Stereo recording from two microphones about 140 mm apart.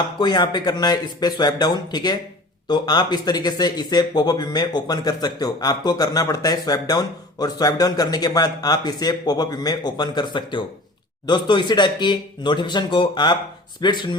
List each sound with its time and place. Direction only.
0.2 s speech: 30° left (ahead or behind)